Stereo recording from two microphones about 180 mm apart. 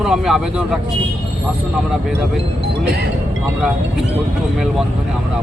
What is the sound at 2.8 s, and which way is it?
Speech, 60° right (ahead or behind).